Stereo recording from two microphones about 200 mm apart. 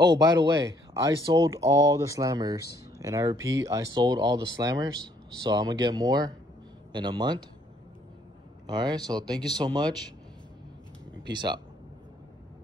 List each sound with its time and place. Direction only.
0.0 s speech: 20° right (ahead or behind)
8.6 s speech: 20° right (ahead or behind)